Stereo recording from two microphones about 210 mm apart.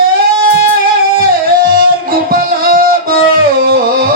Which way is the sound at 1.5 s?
45° right (ahead or behind).